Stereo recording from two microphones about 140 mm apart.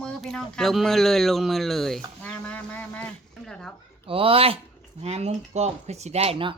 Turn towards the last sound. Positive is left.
turn(degrees=-40)  # may be behind; listen again after turning